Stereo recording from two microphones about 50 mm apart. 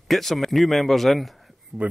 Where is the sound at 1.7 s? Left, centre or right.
Centre.